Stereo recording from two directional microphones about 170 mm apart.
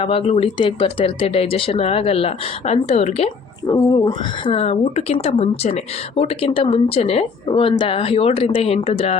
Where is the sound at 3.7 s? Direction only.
20° left (ahead or behind).